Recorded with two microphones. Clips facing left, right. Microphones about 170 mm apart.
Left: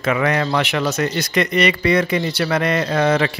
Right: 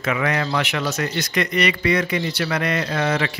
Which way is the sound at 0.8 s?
50° left (ahead or behind).